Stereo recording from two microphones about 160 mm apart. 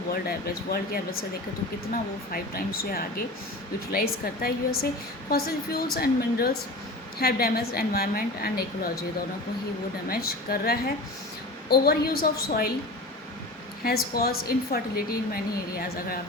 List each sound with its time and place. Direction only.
0.1 s a woman's voice: 70° left (ahead or behind)
1.9 s a woman's voice: 65° left (ahead or behind)
10.1 s a woman's voice: 70° left (ahead or behind)
13.8 s a woman's voice: 70° left (ahead or behind)